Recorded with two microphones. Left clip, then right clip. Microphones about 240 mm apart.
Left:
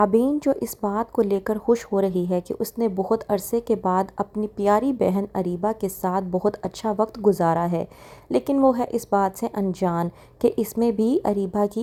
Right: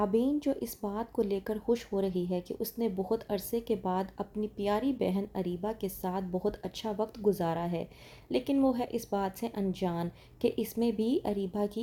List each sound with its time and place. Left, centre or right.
0.0 s speech: left